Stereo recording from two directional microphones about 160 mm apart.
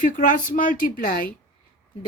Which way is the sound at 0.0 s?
55° left (ahead or behind).